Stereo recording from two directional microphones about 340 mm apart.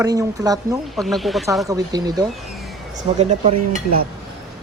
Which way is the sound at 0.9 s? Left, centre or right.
Centre.